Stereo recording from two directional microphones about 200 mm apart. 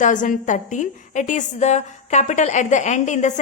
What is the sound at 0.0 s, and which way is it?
A woman's voice, 40° left (ahead or behind).